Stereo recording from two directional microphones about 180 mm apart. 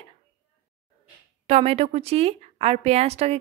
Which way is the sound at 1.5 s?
35° right (ahead or behind).